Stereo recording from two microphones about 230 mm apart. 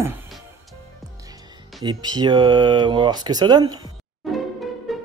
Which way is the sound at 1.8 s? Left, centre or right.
Centre.